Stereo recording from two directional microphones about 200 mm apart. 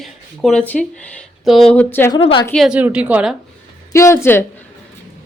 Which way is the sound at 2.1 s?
25° left (ahead or behind).